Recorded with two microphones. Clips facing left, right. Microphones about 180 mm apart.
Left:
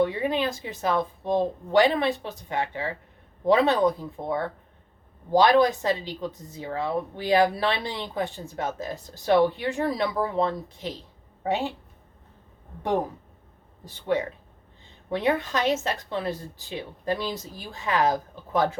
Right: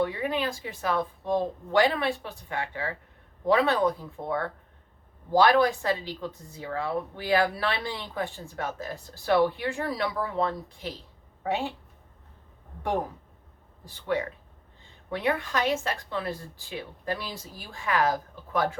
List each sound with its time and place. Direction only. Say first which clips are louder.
0.0 s speech: left 3 dB; 25° left (ahead or behind)
13.8 s speech: left 3 dB; 20° left (ahead or behind)